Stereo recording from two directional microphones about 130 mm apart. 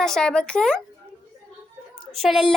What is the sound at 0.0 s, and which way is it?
Speech, 5° left (ahead or behind).